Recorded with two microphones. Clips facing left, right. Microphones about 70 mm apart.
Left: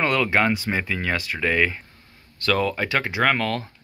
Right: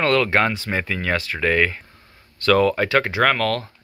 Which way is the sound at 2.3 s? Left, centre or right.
Centre.